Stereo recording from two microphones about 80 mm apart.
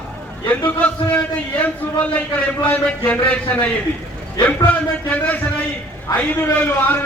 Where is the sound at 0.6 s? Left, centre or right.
Centre.